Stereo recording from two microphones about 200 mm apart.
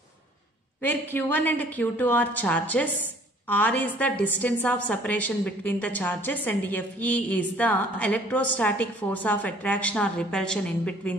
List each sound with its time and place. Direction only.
0.8 s a woman's voice: 10° left (ahead or behind)